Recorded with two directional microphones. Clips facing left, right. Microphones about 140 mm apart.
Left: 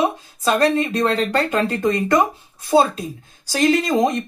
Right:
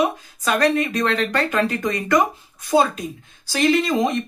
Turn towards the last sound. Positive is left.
turn(degrees=40)  # may be behind; listen again after turning